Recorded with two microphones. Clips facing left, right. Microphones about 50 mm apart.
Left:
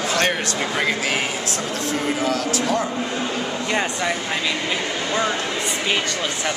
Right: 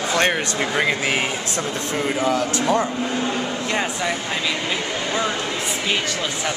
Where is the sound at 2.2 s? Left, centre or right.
Centre.